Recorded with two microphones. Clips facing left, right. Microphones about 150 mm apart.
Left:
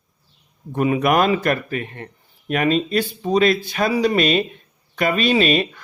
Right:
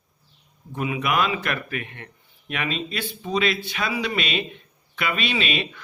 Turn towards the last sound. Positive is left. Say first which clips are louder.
# left 9 dB
turn(degrees=40)  # may be behind; listen again after turning